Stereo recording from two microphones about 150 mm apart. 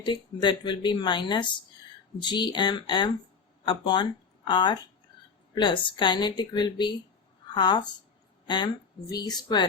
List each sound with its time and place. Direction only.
0.0 s a woman's voice: 30° left (ahead or behind)